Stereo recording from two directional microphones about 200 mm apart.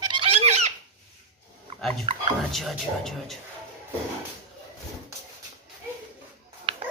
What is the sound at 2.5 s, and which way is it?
Speech, centre (ahead or behind).